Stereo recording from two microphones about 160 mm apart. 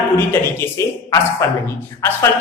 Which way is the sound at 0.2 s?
15° left (ahead or behind).